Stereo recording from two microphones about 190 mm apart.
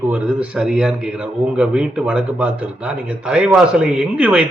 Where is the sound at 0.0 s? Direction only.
5° right (ahead or behind).